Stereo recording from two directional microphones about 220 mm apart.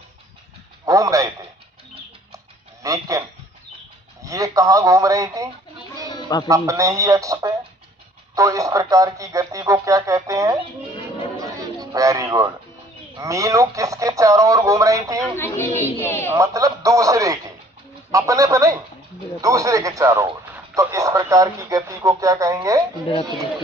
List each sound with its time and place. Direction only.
0.9 s a man's voice: 15° right (ahead or behind)
2.8 s speech: 15° right (ahead or behind)
6.1 s music: 20° left (ahead or behind)
6.5 s speech: 15° right (ahead or behind)
11.3 s a sound: 15° right (ahead or behind)
13.1 s speech: 15° right (ahead or behind)
15.2 s speech: 10° left (ahead or behind)
16.3 s speech: 15° right (ahead or behind)